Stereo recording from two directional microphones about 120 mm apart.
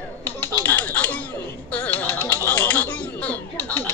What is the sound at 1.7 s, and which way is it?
Music, 15° left (ahead or behind).